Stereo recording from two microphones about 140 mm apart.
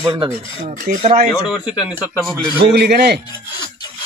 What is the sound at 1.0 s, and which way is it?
Speech, 60° right (ahead or behind).